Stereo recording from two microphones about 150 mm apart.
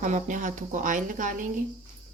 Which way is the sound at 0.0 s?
55° right (ahead or behind).